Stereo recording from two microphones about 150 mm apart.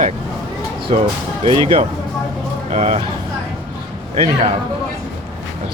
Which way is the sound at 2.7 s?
50° right (ahead or behind).